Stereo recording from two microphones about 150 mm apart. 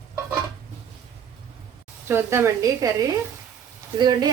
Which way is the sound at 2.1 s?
15° right (ahead or behind).